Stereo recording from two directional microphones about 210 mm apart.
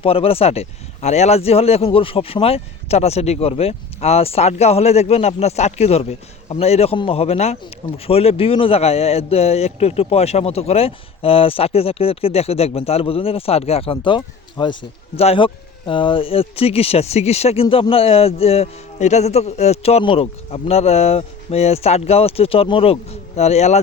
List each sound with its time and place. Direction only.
0.0 s speech: 25° left (ahead or behind)